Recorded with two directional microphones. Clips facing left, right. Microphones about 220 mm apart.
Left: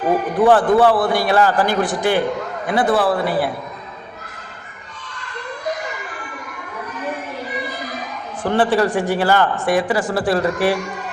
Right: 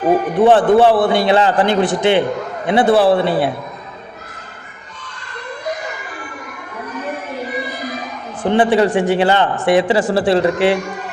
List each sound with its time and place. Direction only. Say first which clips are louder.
0.3 s speech: right 2 dB; 25° right (ahead or behind)
8.4 s speech: right 3 dB; 15° right (ahead or behind)